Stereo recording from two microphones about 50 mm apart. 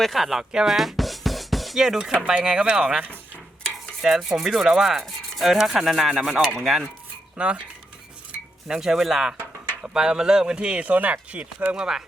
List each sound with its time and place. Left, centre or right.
0.0 s music: centre
1.8 s rub: centre
2.6 s speech: right
4.0 s rub: centre
5.0 s stir: centre
7.3 s speech: right
8.6 s rub: centre
9.9 s speech: centre
11.7 s rub: centre